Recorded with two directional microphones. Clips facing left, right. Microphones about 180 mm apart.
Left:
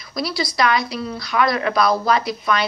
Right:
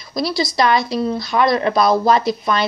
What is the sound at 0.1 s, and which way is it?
A woman's voice, 25° right (ahead or behind).